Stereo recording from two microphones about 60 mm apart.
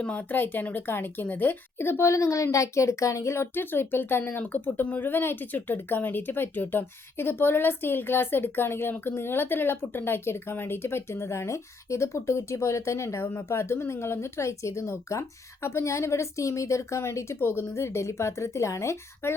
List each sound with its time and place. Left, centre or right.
0.0 s a woman's voice: left